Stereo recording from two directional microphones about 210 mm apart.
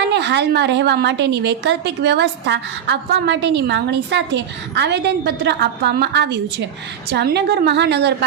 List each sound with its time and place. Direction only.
0.0 s a woman's voice: 55° right (ahead or behind)